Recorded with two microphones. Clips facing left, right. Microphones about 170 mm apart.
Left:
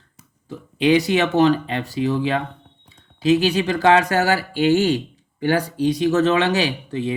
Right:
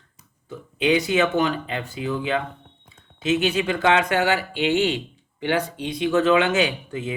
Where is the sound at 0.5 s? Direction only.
35° left (ahead or behind).